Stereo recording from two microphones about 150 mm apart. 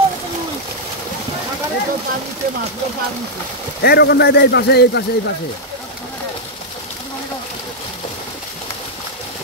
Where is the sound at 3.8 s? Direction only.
90° left.